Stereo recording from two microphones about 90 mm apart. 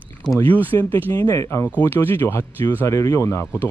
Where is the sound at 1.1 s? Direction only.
40° left (ahead or behind).